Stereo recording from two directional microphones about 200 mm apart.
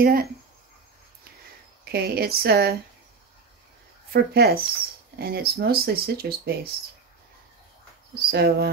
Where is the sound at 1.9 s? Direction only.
50° right (ahead or behind).